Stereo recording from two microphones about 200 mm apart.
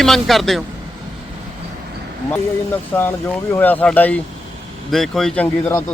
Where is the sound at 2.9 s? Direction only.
10° left (ahead or behind).